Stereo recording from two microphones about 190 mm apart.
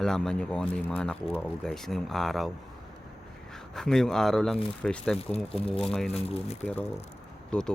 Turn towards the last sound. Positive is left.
turn(degrees=5)  # may be behind; listen again after turning